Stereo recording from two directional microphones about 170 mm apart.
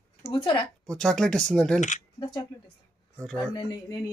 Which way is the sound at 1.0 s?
5° left (ahead or behind).